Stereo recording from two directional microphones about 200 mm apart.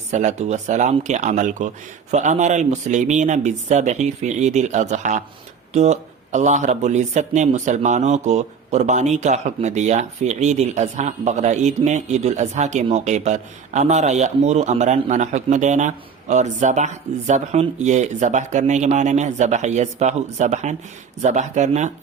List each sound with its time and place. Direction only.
0.1 s speech: 35° right (ahead or behind)